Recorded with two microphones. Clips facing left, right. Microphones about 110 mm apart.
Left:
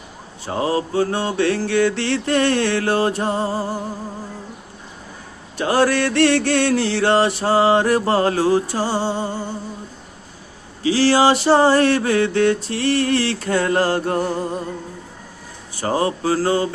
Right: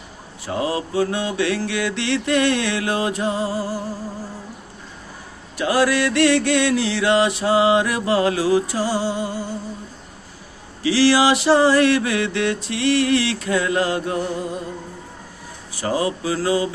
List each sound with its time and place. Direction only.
0.4 s mantra: 30° left (ahead or behind)
5.5 s mantra: 30° left (ahead or behind)
10.8 s mantra: 35° left (ahead or behind)
15.7 s mantra: 35° left (ahead or behind)